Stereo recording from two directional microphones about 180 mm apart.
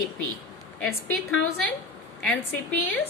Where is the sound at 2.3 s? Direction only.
10° left (ahead or behind).